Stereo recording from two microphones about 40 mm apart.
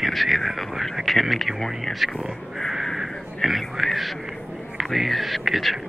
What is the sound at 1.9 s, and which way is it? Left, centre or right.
Speech, centre.